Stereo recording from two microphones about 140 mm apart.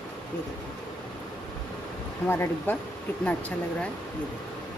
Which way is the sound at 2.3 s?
15° left (ahead or behind).